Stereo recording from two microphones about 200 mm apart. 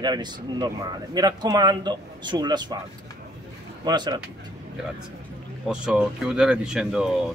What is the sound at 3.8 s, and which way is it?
Speech, 20° right (ahead or behind).